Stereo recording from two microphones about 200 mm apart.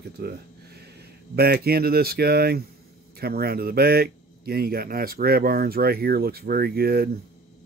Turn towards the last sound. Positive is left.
turn(degrees=-50)  # may be behind; listen again after turning